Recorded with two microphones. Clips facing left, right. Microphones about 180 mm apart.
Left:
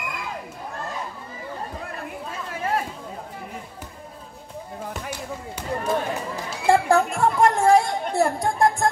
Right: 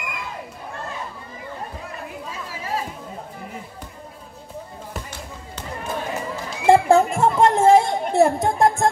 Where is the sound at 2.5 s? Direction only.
55° left (ahead or behind).